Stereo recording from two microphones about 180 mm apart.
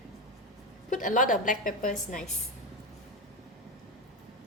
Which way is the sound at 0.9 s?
45° left (ahead or behind).